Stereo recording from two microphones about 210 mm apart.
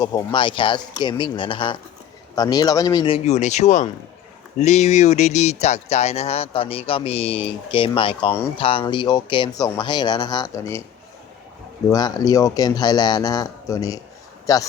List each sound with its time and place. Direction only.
0.0 s speech: 20° left (ahead or behind)
11.9 s a man's voice: 20° left (ahead or behind)